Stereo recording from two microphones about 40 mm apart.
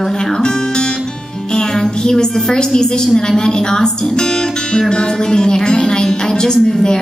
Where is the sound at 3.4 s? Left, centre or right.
Centre.